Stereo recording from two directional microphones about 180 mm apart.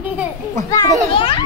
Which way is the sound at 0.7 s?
20° left (ahead or behind).